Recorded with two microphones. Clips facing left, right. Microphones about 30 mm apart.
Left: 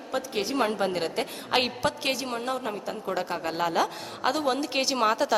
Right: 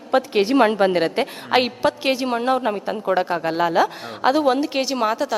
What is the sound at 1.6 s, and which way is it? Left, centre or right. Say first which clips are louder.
A woman's voice: right 7 dB; centre.